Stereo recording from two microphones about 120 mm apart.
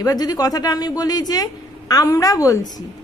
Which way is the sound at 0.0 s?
35° left (ahead or behind).